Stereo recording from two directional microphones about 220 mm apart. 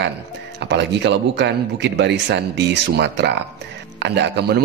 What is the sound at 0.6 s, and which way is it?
A man's voice, 55° right (ahead or behind).